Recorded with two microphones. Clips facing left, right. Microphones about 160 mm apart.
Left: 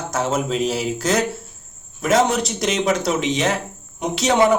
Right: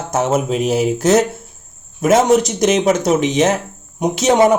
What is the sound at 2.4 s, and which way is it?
A man's voice, 45° right (ahead or behind).